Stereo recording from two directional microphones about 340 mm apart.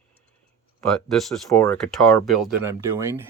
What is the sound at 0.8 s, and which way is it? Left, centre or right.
Speech, centre.